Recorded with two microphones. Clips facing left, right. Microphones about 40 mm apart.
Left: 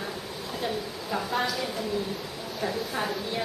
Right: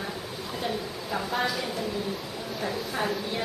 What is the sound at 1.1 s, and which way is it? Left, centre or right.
Speech, centre.